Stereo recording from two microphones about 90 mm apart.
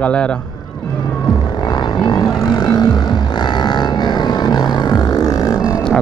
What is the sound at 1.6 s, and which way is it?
Music, 50° left (ahead or behind).